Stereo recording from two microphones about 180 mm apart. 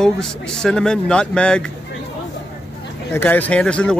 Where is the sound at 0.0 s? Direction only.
5° left (ahead or behind).